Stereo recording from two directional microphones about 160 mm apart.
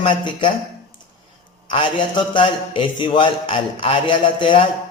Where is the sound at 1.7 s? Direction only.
30° left (ahead or behind).